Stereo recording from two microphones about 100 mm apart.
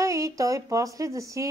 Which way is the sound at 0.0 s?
30° right (ahead or behind).